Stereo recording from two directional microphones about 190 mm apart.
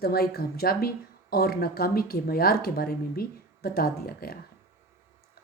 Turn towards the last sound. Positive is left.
turn(degrees=55)  # may be behind; listen again after turning